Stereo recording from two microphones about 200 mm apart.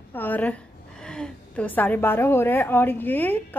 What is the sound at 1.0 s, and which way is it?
A woman's voice, 5° left (ahead or behind).